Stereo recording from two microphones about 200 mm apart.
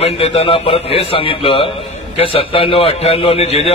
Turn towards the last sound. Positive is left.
turn(degrees=30)  # may be behind; listen again after turning